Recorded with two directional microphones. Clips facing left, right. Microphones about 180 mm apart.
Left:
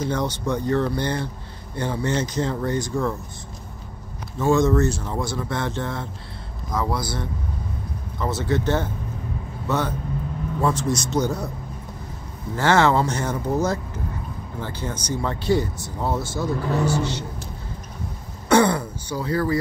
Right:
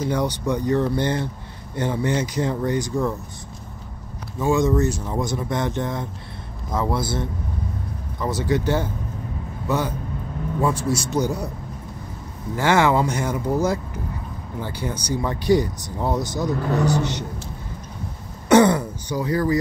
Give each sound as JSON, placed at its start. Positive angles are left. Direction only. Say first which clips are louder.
{"t": 0.0, "sound": "speech", "louder": "right 2 dB", "side_deg": -10}
{"t": 4.4, "sound": "a man's voice", "louder": "left 1 dB", "side_deg": -15}
{"t": 12.5, "sound": "speech", "louder": "even", "side_deg": -15}
{"t": 18.5, "sound": "throat clearing", "louder": "right 3 dB", "side_deg": -20}